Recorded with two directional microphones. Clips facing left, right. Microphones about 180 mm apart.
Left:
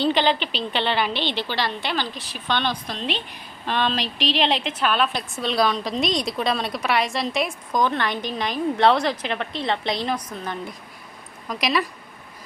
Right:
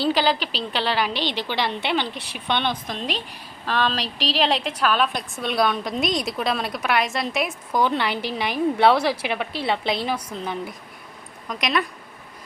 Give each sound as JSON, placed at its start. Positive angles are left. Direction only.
{"t": 0.0, "sound": "a woman's voice", "side_deg": -5}
{"t": 1.1, "sound": "speech", "side_deg": -40}
{"t": 1.4, "sound": "a woman's voice", "side_deg": -15}
{"t": 2.1, "sound": "speech", "side_deg": -60}
{"t": 2.5, "sound": "a woman's voice", "side_deg": -15}
{"t": 3.7, "sound": "a woman's voice", "side_deg": 0}
{"t": 4.0, "sound": "speech", "side_deg": -35}
{"t": 4.4, "sound": "a woman's voice", "side_deg": -5}
{"t": 11.4, "sound": "a woman's voice", "side_deg": 0}